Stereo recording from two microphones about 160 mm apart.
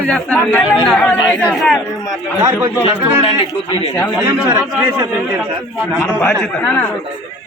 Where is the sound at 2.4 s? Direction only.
20° right (ahead or behind).